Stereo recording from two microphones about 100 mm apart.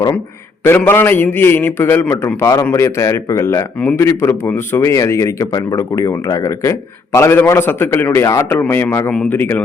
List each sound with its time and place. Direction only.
0.9 s speech: 20° left (ahead or behind)
2.4 s a man's voice: 35° left (ahead or behind); by 9.6 s 20° left (ahead or behind)